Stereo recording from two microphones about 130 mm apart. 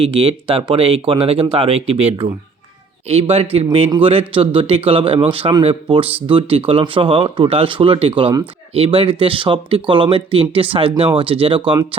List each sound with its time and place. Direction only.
0.0 s speech: 45° right (ahead or behind)